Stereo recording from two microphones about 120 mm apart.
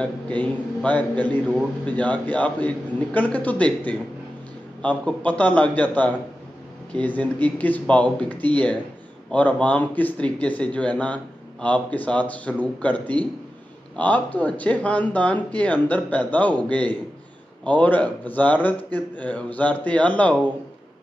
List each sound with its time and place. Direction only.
0.0 s speech: 10° left (ahead or behind)